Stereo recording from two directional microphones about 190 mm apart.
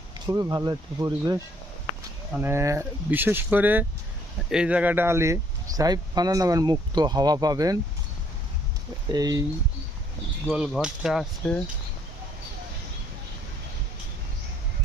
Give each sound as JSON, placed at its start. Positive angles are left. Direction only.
{"t": 0.3, "sound": "speech", "side_deg": -15}
{"t": 9.1, "sound": "speech", "side_deg": -20}
{"t": 10.4, "sound": "speech", "side_deg": 0}